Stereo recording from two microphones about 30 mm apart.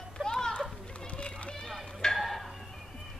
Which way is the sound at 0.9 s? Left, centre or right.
Left.